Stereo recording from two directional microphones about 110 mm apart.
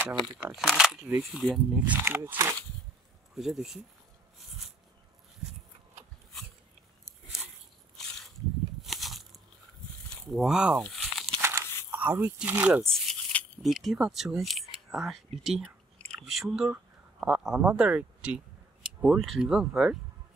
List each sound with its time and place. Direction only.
0.6 s speech: centre (ahead or behind)
2.0 s speech: 20° right (ahead or behind)
3.3 s speech: 5° right (ahead or behind)
8.8 s a sound: centre (ahead or behind)
10.0 s speech: centre (ahead or behind)
10.9 s crumpling: centre (ahead or behind)
11.4 s a sound: 25° right (ahead or behind)
12.4 s speech: 15° right (ahead or behind)
12.8 s rattle: 5° left (ahead or behind)
13.6 s speech: centre (ahead or behind)